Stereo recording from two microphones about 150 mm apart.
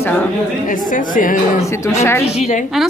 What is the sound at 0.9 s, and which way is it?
Speech, 60° left (ahead or behind).